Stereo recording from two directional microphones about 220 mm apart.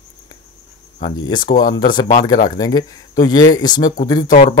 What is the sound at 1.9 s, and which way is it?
Speech, 20° left (ahead or behind).